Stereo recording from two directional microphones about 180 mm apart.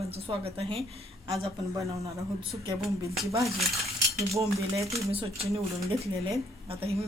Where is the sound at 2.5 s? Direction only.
25° right (ahead or behind).